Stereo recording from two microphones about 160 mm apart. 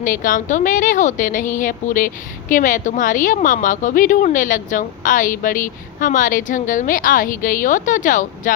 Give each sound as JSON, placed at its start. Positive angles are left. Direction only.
{"t": 0.0, "sound": "a woman's voice", "side_deg": 60}